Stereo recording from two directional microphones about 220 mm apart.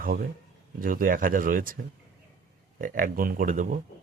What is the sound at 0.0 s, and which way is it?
A man's voice, 40° right (ahead or behind).